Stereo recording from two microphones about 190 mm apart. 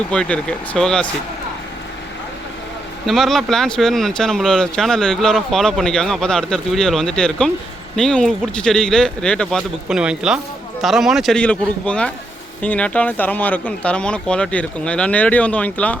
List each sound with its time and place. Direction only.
0.1 s speech: 5° left (ahead or behind)
3.1 s speech: centre (ahead or behind)